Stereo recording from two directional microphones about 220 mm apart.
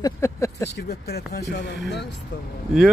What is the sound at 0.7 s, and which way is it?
Speech, 50° left (ahead or behind).